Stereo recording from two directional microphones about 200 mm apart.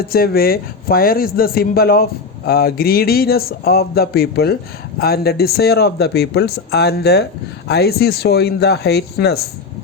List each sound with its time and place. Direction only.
0.1 s speech: 50° left (ahead or behind)